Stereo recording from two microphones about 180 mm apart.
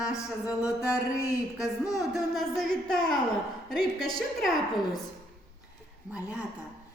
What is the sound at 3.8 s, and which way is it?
Speech, 20° left (ahead or behind).